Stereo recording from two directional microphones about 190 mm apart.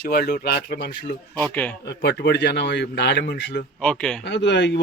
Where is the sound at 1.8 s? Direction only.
65° left (ahead or behind).